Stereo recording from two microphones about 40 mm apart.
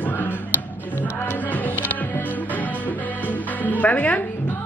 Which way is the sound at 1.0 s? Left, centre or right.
Left.